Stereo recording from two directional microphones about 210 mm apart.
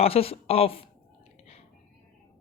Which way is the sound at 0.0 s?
30° left (ahead or behind).